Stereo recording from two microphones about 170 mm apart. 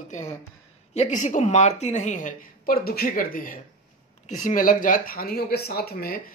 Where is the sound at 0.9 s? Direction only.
45° left (ahead or behind).